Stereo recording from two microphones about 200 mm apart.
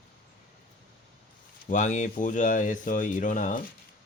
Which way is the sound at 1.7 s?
40° left (ahead or behind).